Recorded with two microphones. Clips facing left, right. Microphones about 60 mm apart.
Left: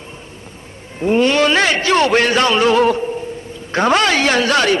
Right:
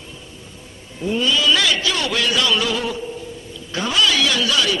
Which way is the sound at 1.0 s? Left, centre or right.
Left.